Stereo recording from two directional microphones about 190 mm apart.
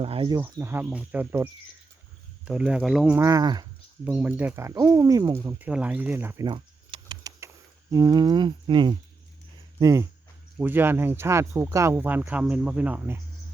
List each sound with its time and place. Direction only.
0.0 s speech: 30° right (ahead or behind)
0.3 s speech: 15° right (ahead or behind)
4.0 s speech: 10° right (ahead or behind)